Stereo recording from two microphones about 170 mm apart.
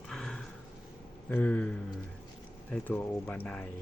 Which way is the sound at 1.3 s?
10° left (ahead or behind).